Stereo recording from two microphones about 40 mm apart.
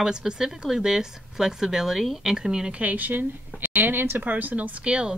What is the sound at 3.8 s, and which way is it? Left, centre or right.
Speech, right.